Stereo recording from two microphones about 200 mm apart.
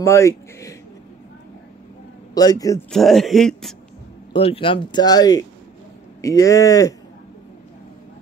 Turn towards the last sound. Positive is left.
turn(degrees=15)  # may be behind; listen again after turning